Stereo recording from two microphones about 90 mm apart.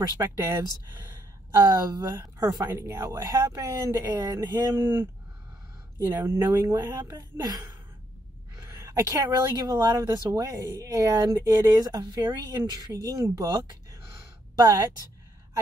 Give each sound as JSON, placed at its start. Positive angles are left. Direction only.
{"t": 0.2, "sound": "speech", "side_deg": -35}
{"t": 2.7, "sound": "speech", "side_deg": -30}
{"t": 4.7, "sound": "speech", "side_deg": -25}
{"t": 6.1, "sound": "speech", "side_deg": -30}
{"t": 8.5, "sound": "speech", "side_deg": -35}